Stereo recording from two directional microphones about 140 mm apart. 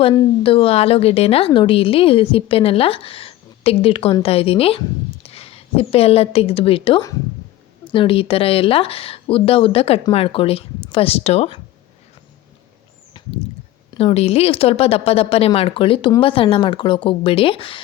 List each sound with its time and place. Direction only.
0.4 s a woman's voice: 40° left (ahead or behind)
13.2 s a sound: 35° left (ahead or behind)
13.9 s a woman's voice: 45° left (ahead or behind)